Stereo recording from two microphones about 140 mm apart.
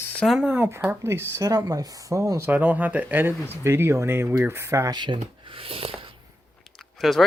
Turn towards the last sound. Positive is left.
turn(degrees=0)  # may be behind; listen again after turning